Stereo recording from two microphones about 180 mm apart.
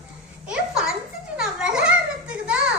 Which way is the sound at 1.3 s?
5° right (ahead or behind).